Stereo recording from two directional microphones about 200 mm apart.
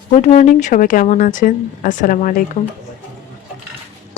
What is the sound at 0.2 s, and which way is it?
Speech, 35° left (ahead or behind).